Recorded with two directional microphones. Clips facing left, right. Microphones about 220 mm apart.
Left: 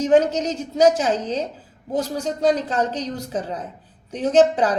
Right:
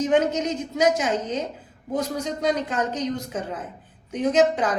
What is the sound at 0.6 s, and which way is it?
Speech, 30° left (ahead or behind).